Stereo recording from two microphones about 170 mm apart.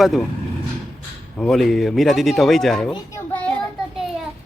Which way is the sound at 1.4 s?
Centre (ahead or behind).